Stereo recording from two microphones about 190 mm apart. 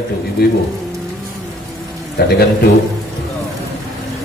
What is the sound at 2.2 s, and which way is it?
Speech, 60° left (ahead or behind).